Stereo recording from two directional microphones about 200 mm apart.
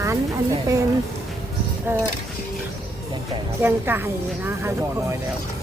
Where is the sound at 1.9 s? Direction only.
10° right (ahead or behind).